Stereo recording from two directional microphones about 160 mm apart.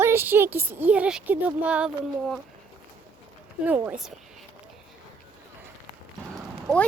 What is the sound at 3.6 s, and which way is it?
Speech, 10° right (ahead or behind).